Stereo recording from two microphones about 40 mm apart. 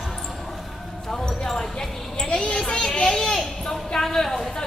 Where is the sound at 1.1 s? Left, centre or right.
Centre.